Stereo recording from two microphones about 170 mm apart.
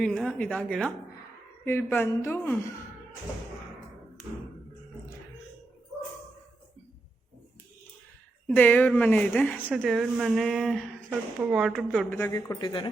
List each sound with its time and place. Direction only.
0.0 s a woman's voice: 5° left (ahead or behind)
8.4 s a woman's voice: 10° left (ahead or behind)
12.3 s speech: 20° left (ahead or behind)